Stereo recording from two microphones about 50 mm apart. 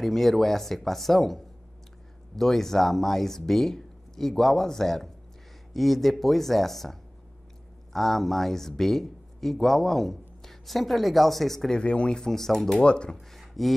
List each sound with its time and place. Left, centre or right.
0.0 s speech: centre
11.8 s speech: left
12.2 s speech: centre
12.8 s speech: centre
13.3 s a sound: centre